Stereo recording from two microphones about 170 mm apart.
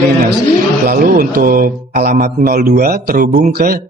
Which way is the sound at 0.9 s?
60° right (ahead or behind).